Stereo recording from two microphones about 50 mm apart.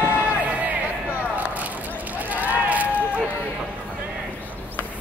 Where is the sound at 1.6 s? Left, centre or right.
Right.